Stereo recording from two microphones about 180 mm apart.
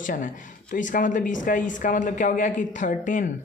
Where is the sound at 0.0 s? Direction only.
45° left (ahead or behind).